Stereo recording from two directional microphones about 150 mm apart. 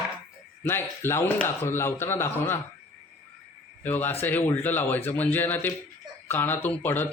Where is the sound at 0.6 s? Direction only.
15° left (ahead or behind).